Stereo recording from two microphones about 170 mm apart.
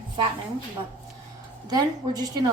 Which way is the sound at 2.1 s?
20° right (ahead or behind).